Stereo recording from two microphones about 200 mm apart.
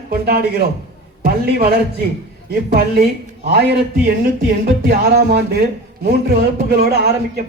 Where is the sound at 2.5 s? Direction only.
50° right (ahead or behind).